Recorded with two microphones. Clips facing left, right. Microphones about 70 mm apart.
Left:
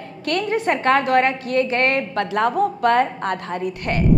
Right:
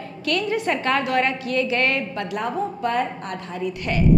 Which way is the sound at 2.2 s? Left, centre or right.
Left.